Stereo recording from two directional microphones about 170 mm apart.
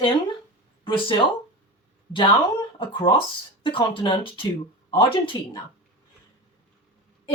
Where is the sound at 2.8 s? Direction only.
30° left (ahead or behind).